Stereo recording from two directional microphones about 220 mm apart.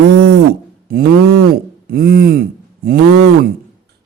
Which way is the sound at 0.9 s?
40° right (ahead or behind).